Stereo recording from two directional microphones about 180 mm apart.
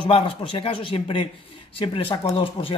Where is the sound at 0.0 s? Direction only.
30° left (ahead or behind).